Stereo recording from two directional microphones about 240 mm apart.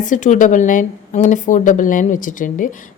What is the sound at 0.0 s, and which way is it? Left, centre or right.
Speech, left.